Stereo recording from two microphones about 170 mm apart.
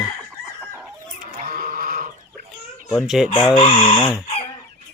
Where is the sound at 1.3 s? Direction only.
60° right (ahead or behind).